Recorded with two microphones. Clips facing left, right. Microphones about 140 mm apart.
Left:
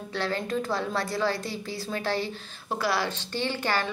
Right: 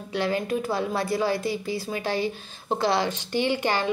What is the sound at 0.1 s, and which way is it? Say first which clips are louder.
A woman's voice: right 4 dB; 15° right (ahead or behind).